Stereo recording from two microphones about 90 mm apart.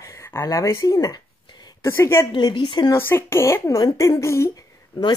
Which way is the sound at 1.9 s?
30° left (ahead or behind).